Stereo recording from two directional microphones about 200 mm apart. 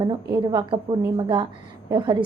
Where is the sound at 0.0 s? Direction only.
20° right (ahead or behind).